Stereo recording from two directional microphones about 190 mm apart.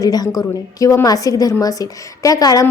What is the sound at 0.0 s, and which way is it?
A woman's voice, 20° left (ahead or behind).